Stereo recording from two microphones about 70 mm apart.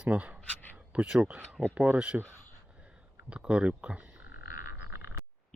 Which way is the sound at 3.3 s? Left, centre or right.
Centre.